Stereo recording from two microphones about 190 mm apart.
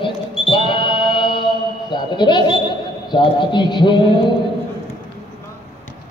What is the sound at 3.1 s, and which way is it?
A man's voice, 25° left (ahead or behind).